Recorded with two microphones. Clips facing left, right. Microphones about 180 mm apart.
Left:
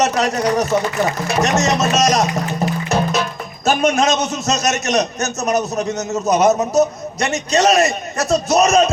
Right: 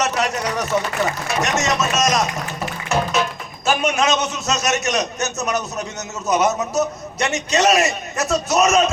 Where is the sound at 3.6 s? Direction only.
40° left (ahead or behind).